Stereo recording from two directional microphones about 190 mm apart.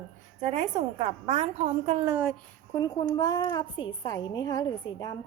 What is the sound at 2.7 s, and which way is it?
A woman's voice, 20° left (ahead or behind).